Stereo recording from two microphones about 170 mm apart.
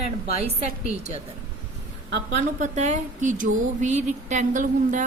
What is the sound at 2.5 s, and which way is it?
Speech, 45° right (ahead or behind).